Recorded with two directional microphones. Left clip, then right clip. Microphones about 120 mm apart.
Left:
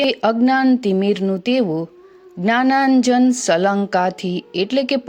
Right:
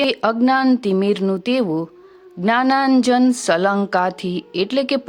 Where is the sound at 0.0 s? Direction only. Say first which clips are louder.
Left 1 dB; 50° left (ahead or behind).